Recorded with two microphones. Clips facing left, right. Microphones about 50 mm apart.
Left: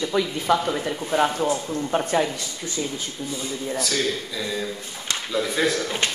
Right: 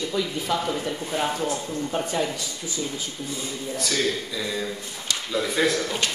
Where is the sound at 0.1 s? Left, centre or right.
Left.